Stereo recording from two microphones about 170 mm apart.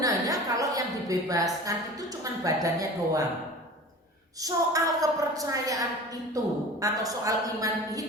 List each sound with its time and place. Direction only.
0.0 s a woman's voice: 20° right (ahead or behind)
4.4 s a man's voice: 20° right (ahead or behind)